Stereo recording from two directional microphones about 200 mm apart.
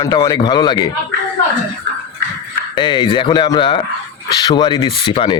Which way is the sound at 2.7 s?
25° left (ahead or behind).